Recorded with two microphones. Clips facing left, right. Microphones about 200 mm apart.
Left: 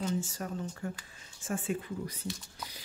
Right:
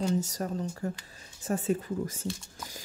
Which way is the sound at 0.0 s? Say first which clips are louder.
Right 5 dB; 40° right (ahead or behind).